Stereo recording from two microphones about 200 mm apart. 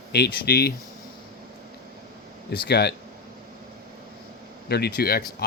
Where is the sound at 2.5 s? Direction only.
55° left (ahead or behind).